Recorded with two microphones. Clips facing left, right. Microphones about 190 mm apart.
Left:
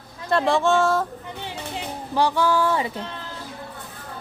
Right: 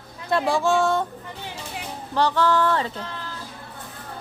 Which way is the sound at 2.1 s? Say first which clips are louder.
Even; 10° left (ahead or behind).